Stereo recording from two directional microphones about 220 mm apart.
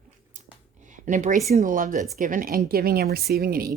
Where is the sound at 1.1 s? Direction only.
35° right (ahead or behind).